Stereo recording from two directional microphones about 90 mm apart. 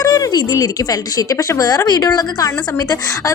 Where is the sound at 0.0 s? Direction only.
40° left (ahead or behind).